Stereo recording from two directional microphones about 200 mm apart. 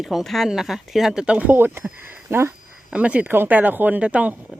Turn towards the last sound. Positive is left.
turn(degrees=-5)  # may be behind; listen again after turning